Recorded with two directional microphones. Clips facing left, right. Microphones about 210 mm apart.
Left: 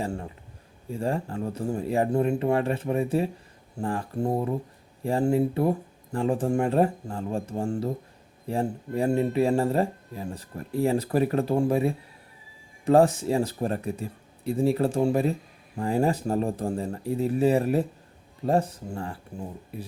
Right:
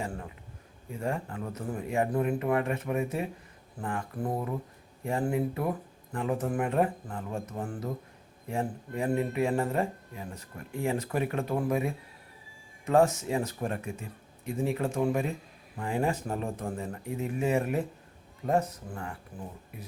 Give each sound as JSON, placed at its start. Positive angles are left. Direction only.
{"t": 0.0, "sound": "speech", "side_deg": 30}